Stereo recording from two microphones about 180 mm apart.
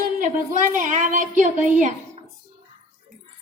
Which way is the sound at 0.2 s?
45° right (ahead or behind).